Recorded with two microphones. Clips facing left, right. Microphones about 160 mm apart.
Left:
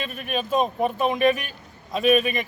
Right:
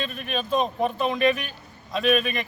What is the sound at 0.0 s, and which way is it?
A man's voice, 10° left (ahead or behind).